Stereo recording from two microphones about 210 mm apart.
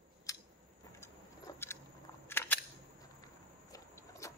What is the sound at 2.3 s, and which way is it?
Single-lens reflex camera, 10° left (ahead or behind).